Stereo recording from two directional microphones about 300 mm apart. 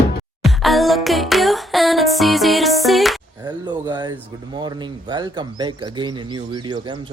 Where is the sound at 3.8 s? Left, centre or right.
Centre.